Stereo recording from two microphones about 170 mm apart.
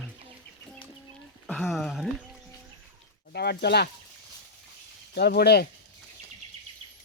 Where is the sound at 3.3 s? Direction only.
75° left (ahead or behind).